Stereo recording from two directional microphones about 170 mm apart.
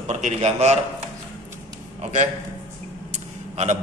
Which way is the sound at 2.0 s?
45° right (ahead or behind).